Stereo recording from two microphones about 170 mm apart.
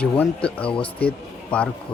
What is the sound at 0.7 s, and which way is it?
Speech, 35° left (ahead or behind).